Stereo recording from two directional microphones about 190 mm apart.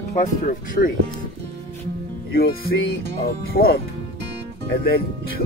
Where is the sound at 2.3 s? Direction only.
55° left (ahead or behind).